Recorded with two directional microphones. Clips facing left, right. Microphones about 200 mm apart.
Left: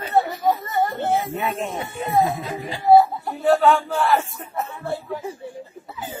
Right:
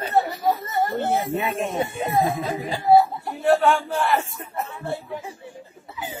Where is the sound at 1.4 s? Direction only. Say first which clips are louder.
Right 1 dB; 25° right (ahead or behind).